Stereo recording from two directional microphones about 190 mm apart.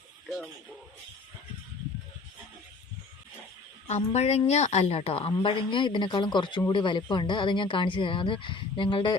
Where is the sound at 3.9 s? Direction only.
35° left (ahead or behind).